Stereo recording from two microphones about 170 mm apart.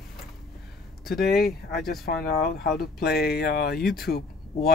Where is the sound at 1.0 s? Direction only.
60° left (ahead or behind).